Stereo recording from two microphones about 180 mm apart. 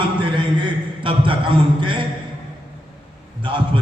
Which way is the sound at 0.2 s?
30° right (ahead or behind).